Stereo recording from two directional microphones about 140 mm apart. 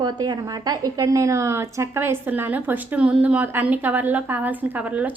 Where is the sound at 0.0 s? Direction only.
30° right (ahead or behind).